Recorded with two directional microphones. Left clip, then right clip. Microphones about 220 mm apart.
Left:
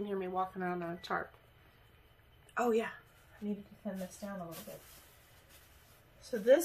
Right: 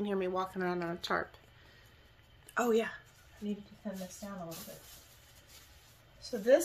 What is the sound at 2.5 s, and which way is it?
Speech, 25° right (ahead or behind).